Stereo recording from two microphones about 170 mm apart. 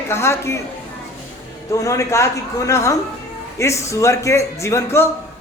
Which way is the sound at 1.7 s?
20° left (ahead or behind).